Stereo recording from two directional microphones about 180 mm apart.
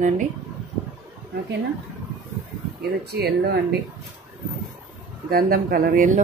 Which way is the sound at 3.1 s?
65° right (ahead or behind).